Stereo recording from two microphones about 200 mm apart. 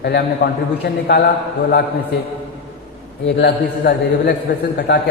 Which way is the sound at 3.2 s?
60° left (ahead or behind).